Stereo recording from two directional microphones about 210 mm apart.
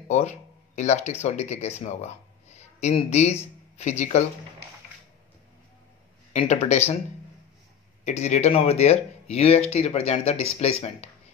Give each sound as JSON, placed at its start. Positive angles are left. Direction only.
{"t": 0.7, "sound": "speech", "side_deg": 30}
{"t": 6.3, "sound": "speech", "side_deg": 35}
{"t": 8.0, "sound": "speech", "side_deg": 30}